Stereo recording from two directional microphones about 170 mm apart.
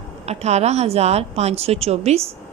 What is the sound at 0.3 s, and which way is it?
Speech, 40° right (ahead or behind).